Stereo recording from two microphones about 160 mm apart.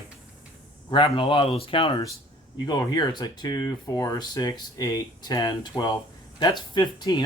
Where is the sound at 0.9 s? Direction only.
30° left (ahead or behind).